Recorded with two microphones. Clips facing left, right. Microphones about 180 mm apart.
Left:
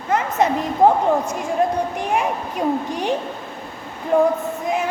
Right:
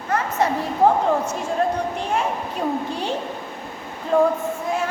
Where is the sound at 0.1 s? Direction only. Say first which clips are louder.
Left 3 dB; 20° left (ahead or behind).